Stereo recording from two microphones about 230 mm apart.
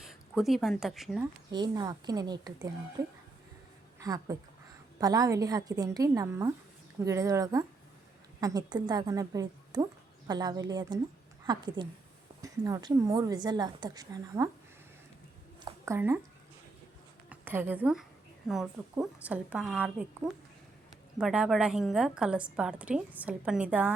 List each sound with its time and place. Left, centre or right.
0.0 s speech: centre
1.5 s a woman's voice: centre
15.6 s a sound: centre
17.2 s a woman's voice: centre